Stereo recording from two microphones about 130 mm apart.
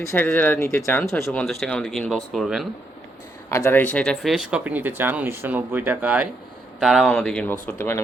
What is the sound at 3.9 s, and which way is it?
Speech, 5° left (ahead or behind).